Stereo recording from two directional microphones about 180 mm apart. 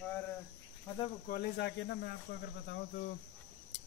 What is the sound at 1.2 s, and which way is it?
Speech, 60° left (ahead or behind).